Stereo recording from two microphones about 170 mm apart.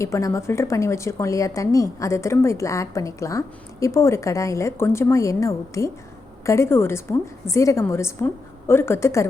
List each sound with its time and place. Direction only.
0.0 s a woman's voice: 20° left (ahead or behind)